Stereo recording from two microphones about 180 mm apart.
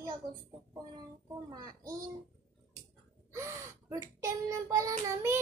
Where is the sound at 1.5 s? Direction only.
20° right (ahead or behind).